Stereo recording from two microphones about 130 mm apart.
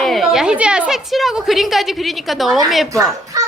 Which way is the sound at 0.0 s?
Centre (ahead or behind).